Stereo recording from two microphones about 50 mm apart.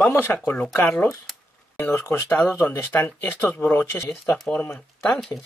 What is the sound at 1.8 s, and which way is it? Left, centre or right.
Speech, left.